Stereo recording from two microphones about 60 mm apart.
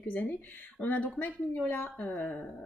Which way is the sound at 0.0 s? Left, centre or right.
Left.